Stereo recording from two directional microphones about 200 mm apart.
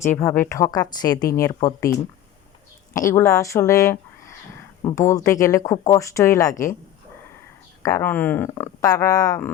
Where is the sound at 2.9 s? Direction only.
15° left (ahead or behind).